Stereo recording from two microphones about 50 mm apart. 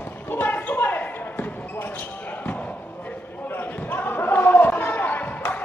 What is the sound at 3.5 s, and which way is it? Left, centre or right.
Basketball bounce, left.